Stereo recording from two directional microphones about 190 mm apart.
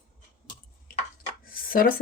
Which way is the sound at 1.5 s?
50° left (ahead or behind).